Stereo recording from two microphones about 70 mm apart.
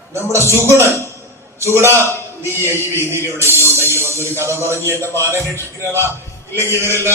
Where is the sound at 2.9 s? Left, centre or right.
Right.